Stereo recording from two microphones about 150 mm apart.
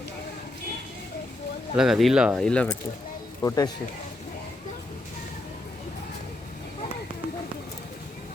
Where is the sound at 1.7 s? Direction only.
Centre (ahead or behind).